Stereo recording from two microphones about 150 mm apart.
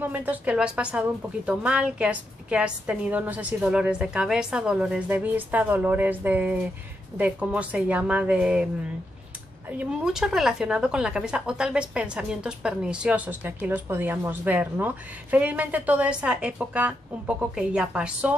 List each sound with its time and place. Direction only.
0.0 s a woman's voice: 10° right (ahead or behind)
9.7 s a woman's voice: 5° right (ahead or behind)